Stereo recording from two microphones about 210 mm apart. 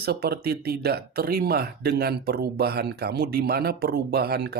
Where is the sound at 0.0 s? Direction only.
50° right (ahead or behind).